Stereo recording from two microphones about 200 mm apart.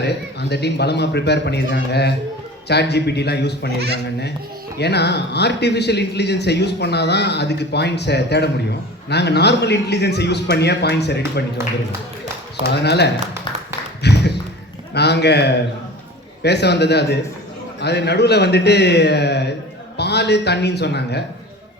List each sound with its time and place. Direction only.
0.0 s speech: 55° left (ahead or behind)
4.8 s speech: 55° left (ahead or behind)
12.6 s speech: 55° left (ahead or behind)
13.7 s tap: 55° left (ahead or behind)
14.9 s speech: 55° left (ahead or behind)